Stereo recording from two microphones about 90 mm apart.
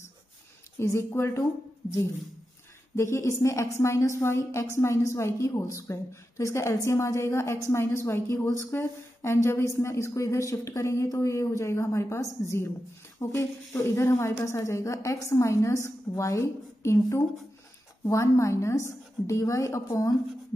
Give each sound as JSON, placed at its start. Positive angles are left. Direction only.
{"t": 0.7, "sound": "speech", "side_deg": 30}
{"t": 3.0, "sound": "a woman's voice", "side_deg": 35}